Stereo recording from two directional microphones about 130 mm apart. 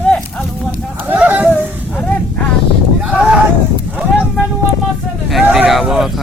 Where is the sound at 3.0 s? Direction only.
10° right (ahead or behind).